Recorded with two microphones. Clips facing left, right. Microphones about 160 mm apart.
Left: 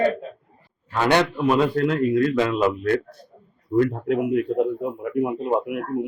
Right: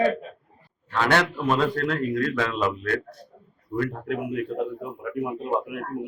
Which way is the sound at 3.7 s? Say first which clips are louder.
Left 7 dB; 25° left (ahead or behind).